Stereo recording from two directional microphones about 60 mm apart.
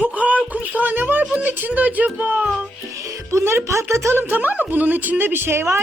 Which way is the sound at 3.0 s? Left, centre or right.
Right.